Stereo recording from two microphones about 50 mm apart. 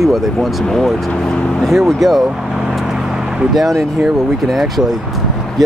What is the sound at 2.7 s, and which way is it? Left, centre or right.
Vehicle, centre.